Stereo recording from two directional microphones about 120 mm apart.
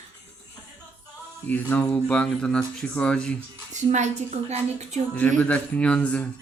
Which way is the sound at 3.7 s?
85° right.